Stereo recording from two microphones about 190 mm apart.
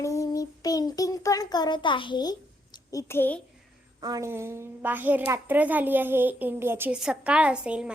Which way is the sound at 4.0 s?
15° right (ahead or behind).